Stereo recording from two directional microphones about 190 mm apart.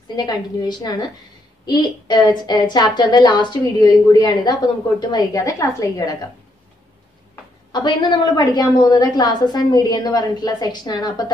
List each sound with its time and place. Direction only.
0.1 s a woman's voice: 20° left (ahead or behind)
7.7 s a woman's voice: 25° left (ahead or behind)